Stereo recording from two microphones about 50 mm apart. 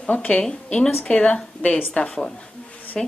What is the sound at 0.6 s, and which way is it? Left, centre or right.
Speech, centre.